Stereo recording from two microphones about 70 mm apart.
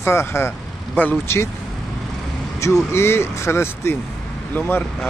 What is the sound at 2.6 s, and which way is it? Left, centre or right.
Speech, left.